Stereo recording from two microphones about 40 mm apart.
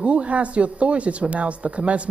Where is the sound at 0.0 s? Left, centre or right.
Right.